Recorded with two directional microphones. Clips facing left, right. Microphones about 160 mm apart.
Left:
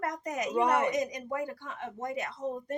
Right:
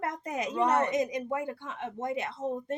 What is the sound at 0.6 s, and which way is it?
Speech, 10° left (ahead or behind).